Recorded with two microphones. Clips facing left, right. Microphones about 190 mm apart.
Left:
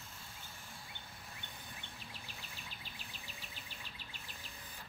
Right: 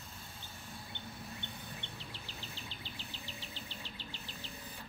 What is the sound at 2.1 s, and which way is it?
Insect, 25° right (ahead or behind).